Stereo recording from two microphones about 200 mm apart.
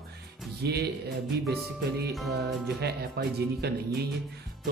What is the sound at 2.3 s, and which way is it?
Speech, 55° right (ahead or behind).